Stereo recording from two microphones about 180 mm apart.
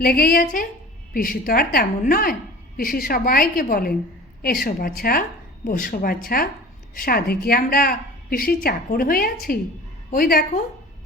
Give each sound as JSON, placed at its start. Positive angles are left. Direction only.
{"t": 0.0, "sound": "a woman's voice", "side_deg": 55}